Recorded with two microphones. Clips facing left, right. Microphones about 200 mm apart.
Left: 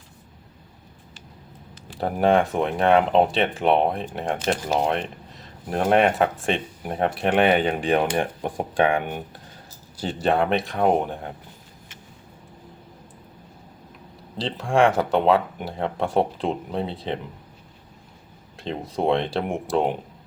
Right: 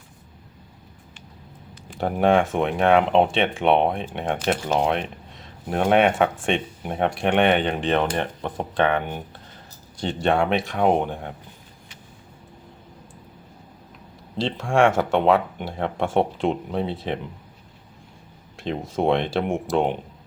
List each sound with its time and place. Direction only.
2.0 s speech: centre (ahead or behind)
14.3 s speech: centre (ahead or behind)
18.5 s speech: centre (ahead or behind)